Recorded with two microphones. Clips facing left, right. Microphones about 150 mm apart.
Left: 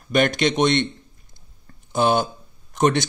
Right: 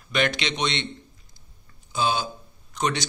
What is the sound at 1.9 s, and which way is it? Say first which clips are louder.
Speech: left 6 dB; 55° left (ahead or behind).